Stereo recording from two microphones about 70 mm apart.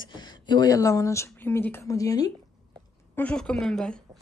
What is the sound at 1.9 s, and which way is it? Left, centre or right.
Speech, left.